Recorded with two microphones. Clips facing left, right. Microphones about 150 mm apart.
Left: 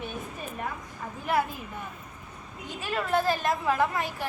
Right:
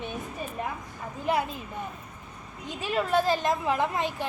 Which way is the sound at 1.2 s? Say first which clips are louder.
Even; 20° right (ahead or behind).